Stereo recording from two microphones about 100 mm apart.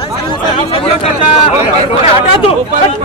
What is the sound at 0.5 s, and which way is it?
Speech, 75° left (ahead or behind).